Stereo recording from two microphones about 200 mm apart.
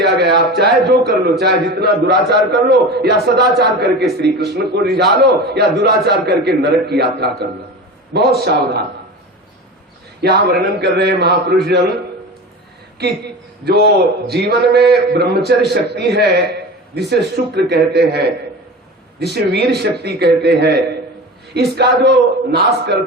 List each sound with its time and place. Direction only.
0.0 s a man's voice: 55° right (ahead or behind)
10.2 s a man's voice: 55° right (ahead or behind)
13.0 s a man's voice: 55° right (ahead or behind)